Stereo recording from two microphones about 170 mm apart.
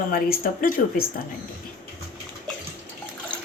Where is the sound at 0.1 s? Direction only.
60° left (ahead or behind).